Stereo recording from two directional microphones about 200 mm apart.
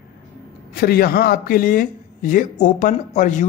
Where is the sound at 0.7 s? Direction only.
50° left (ahead or behind).